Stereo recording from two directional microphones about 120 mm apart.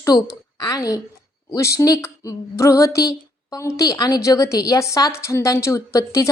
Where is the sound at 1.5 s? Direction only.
25° left (ahead or behind).